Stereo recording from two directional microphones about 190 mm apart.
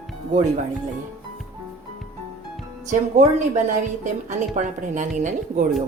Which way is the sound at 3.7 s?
40° right (ahead or behind).